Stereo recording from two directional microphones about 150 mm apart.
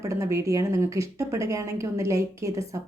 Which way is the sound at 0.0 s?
20° right (ahead or behind).